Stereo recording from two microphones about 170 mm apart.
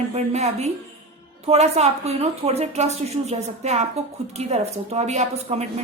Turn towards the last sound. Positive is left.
turn(degrees=-40)  # may be behind; listen again after turning